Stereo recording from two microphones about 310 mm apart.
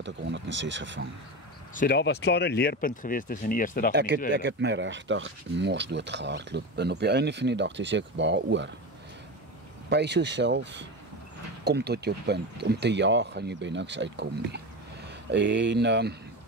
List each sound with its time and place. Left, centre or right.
0.0 s speech: right
1.8 s speech: left
3.9 s speech: right
9.8 s speech: right